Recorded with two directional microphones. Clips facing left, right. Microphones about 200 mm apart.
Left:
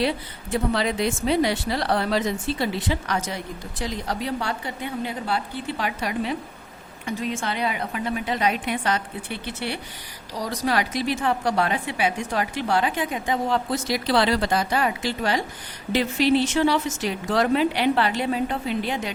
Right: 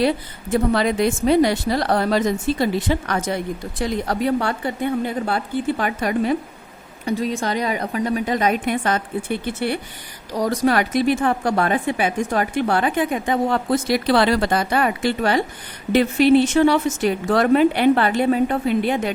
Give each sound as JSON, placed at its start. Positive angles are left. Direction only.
{"t": 0.5, "sound": "speech", "side_deg": -50}